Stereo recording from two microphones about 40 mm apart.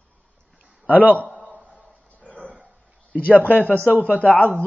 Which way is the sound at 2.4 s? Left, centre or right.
Right.